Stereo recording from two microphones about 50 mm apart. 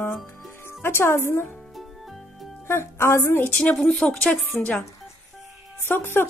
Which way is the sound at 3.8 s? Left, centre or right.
Centre.